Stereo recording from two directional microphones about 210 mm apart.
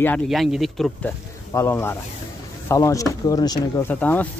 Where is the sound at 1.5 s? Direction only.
10° left (ahead or behind).